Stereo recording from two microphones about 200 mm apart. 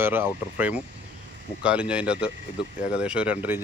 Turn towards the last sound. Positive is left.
turn(degrees=-10)  # may be behind; listen again after turning